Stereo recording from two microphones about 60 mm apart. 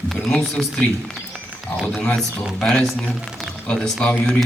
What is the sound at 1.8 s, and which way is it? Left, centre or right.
Speech, centre.